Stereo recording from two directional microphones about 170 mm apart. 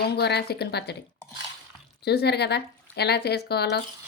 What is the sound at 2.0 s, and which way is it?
Speech, 75° left (ahead or behind).